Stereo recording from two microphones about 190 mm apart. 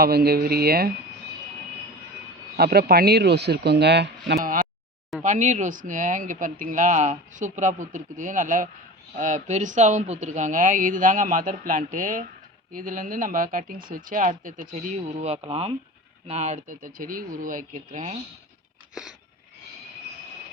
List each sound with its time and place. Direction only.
0.0 s speech: 55° right (ahead or behind)
2.6 s speech: 55° right (ahead or behind)
5.2 s speech: 40° right (ahead or behind)